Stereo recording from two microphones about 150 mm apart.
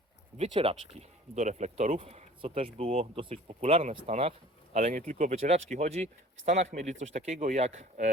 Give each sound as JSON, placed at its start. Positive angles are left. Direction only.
{"t": 0.3, "sound": "speech", "side_deg": -40}
{"t": 1.4, "sound": "speech", "side_deg": -50}